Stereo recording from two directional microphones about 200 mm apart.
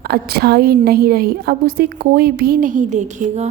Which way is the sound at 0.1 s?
50° right (ahead or behind).